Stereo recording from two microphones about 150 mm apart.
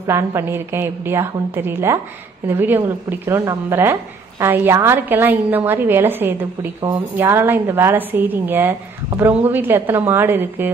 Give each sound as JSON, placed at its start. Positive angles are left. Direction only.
{"t": 0.0, "sound": "a woman's voice", "side_deg": -20}